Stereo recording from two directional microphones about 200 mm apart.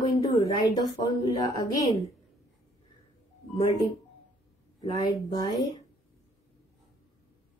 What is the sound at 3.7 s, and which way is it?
Speech, 15° left (ahead or behind).